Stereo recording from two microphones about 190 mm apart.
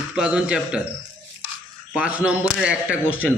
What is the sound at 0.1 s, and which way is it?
Speech, 5° right (ahead or behind).